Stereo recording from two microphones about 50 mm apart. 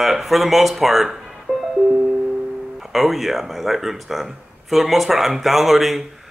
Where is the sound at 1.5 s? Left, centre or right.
Centre.